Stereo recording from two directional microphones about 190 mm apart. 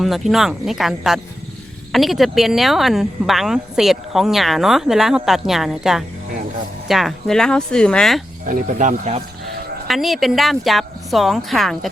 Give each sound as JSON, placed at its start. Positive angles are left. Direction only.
{"t": 0.0, "sound": "speech", "side_deg": 0}
{"t": 8.4, "sound": "speech", "side_deg": -45}
{"t": 9.8, "sound": "speech", "side_deg": 0}